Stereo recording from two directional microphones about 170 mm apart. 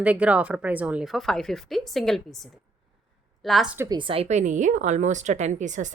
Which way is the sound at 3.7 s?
25° right (ahead or behind).